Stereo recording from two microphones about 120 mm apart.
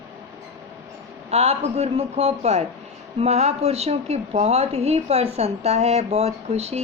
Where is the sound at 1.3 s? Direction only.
60° right (ahead or behind).